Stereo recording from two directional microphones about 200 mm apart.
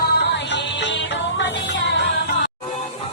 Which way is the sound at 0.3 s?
60° left (ahead or behind).